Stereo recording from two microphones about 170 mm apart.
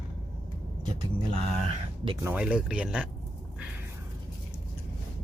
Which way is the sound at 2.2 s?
10° right (ahead or behind).